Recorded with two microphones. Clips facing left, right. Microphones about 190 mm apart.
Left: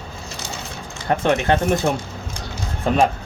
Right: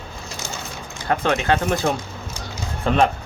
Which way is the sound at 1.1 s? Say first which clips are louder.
Left 2 dB; 20° left (ahead or behind).